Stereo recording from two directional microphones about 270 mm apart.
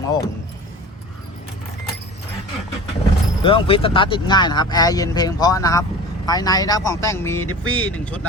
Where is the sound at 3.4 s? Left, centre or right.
Centre.